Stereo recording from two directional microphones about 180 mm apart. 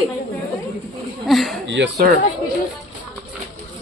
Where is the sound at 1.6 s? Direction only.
85° right.